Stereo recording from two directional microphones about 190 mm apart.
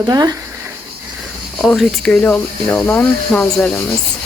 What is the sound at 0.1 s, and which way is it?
Speech, 20° right (ahead or behind).